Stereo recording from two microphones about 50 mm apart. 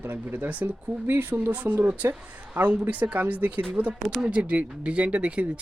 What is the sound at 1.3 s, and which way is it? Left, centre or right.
Speech, right.